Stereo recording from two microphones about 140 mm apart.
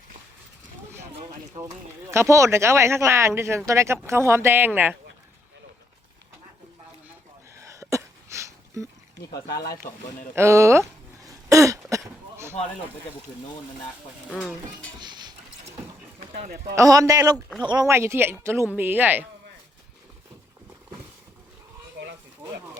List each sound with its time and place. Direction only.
1.5 s speech: 25° right (ahead or behind)
7.5 s a sound: 20° right (ahead or behind)
10.3 s speech: 20° right (ahead or behind)
11.3 s throat clearing: 25° right (ahead or behind)
14.9 s a sound: 30° right (ahead or behind)
16.2 s speech: 80° right
16.7 s speech: 25° right (ahead or behind)
17.8 s speech: 20° right (ahead or behind)